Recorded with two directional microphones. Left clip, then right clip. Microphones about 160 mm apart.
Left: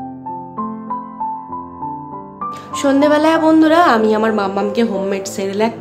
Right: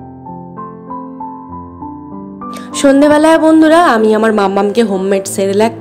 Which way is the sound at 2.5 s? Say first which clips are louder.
Right 6 dB; 35° right (ahead or behind).